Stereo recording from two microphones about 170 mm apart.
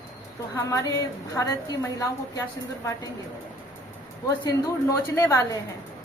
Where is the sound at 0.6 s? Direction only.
20° left (ahead or behind).